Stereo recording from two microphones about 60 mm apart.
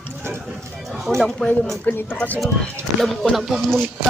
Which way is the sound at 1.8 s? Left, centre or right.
Left.